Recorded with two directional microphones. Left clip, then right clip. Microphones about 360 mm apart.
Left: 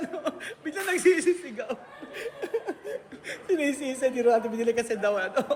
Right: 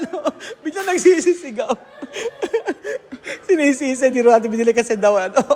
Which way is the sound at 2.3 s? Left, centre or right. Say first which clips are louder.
Right 9 dB; right.